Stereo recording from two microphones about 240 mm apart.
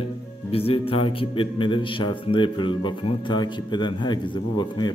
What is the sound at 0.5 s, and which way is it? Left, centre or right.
A man's voice, left.